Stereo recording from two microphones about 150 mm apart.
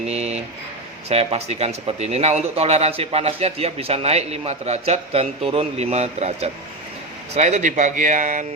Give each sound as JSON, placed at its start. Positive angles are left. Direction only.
{"t": 0.1, "sound": "speech", "side_deg": -45}